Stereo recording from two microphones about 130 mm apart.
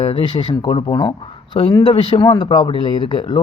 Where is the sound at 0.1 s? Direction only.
35° left (ahead or behind).